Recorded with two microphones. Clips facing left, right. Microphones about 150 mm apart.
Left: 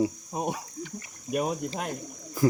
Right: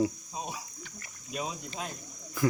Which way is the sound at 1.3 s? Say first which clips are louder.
Left 8 dB; 60° left (ahead or behind).